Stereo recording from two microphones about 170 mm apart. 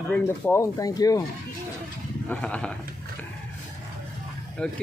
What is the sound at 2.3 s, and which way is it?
Speech, 5° left (ahead or behind).